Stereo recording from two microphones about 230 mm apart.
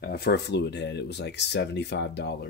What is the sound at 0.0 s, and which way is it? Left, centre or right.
Speech, left.